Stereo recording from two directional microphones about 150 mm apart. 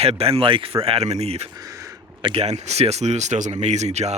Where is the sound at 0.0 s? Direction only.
40° right (ahead or behind).